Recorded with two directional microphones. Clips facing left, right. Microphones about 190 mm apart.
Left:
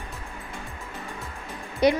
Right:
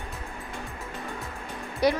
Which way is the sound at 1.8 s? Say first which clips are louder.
Left 3 dB; 20° left (ahead or behind).